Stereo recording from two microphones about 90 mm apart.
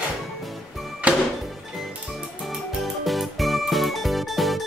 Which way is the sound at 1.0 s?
15° right (ahead or behind).